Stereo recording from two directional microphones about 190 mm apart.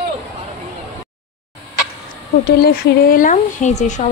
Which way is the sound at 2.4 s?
55° left (ahead or behind).